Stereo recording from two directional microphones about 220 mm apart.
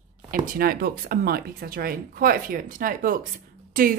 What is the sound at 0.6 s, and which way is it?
A woman's voice, 45° right (ahead or behind).